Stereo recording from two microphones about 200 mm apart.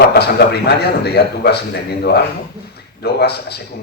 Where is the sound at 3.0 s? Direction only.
55° left (ahead or behind).